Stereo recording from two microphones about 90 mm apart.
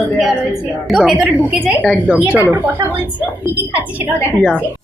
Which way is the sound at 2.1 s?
15° right (ahead or behind).